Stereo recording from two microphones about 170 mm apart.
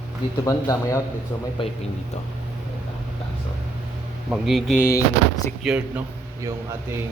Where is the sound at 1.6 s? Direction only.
30° left (ahead or behind).